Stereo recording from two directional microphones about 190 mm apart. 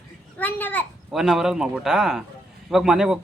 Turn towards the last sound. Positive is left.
turn(degrees=-5)  # may be behind; listen again after turning